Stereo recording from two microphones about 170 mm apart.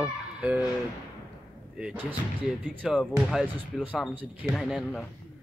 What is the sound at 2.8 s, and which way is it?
Speech, centre (ahead or behind).